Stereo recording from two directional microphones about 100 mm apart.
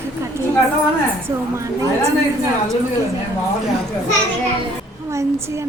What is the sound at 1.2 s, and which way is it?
Speech, 30° right (ahead or behind).